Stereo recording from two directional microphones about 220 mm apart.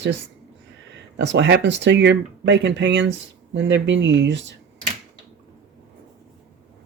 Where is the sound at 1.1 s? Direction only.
55° right (ahead or behind).